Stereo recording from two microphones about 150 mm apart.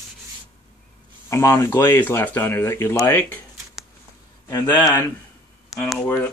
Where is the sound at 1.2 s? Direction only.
20° left (ahead or behind).